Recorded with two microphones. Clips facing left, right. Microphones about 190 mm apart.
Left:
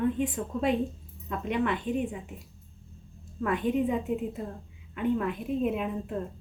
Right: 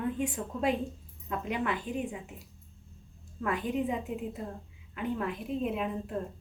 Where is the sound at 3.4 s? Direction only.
Centre (ahead or behind).